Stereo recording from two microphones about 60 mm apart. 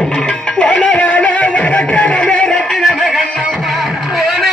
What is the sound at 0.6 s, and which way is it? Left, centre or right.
Music, centre.